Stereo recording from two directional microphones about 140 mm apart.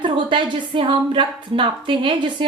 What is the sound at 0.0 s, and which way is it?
A woman's voice, 35° right (ahead or behind).